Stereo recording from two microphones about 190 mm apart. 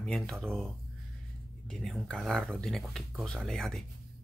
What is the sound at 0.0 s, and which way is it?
Speech, 5° left (ahead or behind).